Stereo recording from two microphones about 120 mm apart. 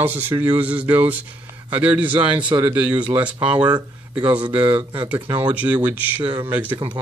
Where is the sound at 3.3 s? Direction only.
45° right (ahead or behind).